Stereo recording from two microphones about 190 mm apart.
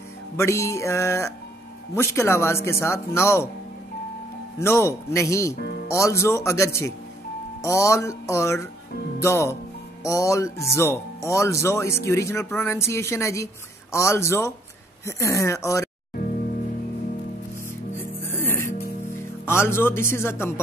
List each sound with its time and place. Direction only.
0.4 s speech: 15° left (ahead or behind)
4.6 s speech: 15° left (ahead or behind)
5.6 s music: 55° left (ahead or behind)
5.9 s speech: 15° left (ahead or behind)
18.3 s music: 10° left (ahead or behind)
19.4 s speech: 15° left (ahead or behind)